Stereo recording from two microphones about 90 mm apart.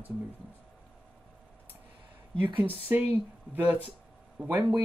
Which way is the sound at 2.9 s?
25° right (ahead or behind).